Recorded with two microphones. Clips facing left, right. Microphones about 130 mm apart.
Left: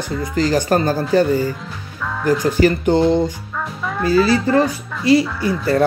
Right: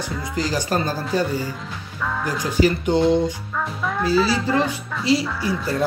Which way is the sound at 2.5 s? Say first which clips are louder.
Even; 50° left (ahead or behind).